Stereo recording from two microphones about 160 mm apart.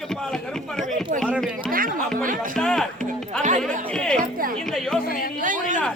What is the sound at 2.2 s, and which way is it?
Speech, 55° right (ahead or behind).